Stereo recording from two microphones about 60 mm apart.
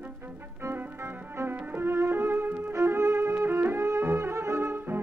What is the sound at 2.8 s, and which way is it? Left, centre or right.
Violin, right.